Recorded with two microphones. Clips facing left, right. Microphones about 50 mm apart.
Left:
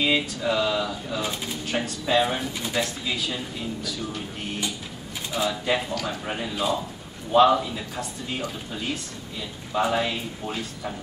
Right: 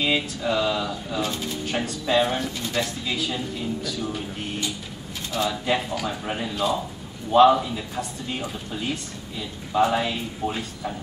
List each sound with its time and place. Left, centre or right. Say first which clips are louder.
0.0 s speech: left 1 dB; centre